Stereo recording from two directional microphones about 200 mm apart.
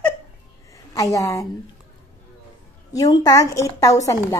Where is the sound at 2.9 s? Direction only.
20° left (ahead or behind).